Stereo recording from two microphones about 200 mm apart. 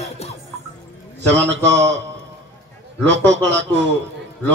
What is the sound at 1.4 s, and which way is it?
Speech, 60° right (ahead or behind).